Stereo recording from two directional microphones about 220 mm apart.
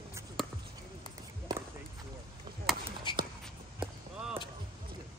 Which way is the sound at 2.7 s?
Centre (ahead or behind).